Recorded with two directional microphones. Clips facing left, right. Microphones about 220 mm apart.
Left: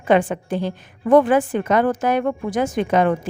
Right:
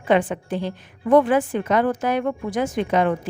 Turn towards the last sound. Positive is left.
turn(degrees=50)  # may be behind; listen again after turning